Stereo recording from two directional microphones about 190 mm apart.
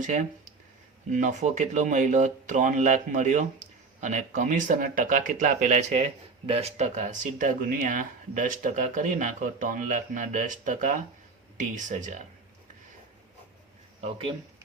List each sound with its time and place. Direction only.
0.0 s speech: 40° right (ahead or behind)
14.0 s speech: 30° right (ahead or behind)